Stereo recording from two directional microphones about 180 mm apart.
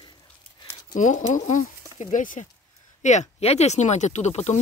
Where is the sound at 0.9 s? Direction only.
45° left (ahead or behind).